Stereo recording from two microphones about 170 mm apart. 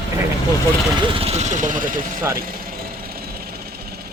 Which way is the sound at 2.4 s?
60° right (ahead or behind).